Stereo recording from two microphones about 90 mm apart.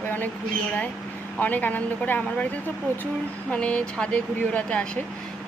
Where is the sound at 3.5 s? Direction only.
15° left (ahead or behind).